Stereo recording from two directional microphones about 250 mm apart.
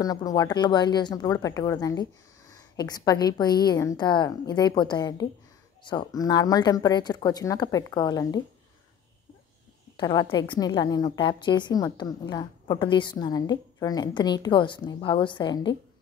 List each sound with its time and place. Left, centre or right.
0.0 s a woman's voice: centre
9.9 s a woman's voice: centre